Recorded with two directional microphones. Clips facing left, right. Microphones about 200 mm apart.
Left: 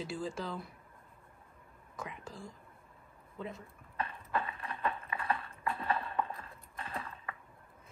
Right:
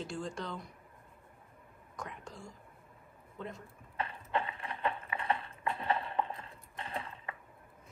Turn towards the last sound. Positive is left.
turn(degrees=-25)  # may be behind; listen again after turning